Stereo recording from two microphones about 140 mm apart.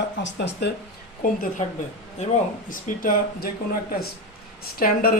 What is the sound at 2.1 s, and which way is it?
Speech, 65° left (ahead or behind).